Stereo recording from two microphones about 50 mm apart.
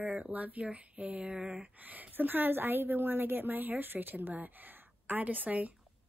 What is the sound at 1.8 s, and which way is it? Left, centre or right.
A woman's voice, right.